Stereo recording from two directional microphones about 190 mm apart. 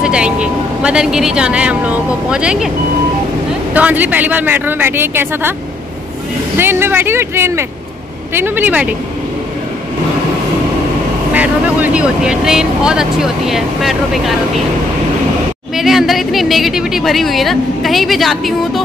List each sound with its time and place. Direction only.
0.0 s speech: 5° right (ahead or behind)
3.7 s a woman's voice: 10° right (ahead or behind)
6.6 s a woman's voice: 10° right (ahead or behind)
11.3 s speech: 10° right (ahead or behind)
15.7 s speech: centre (ahead or behind)